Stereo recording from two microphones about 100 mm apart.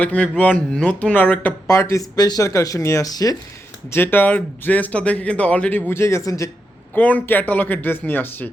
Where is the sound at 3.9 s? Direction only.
20° left (ahead or behind).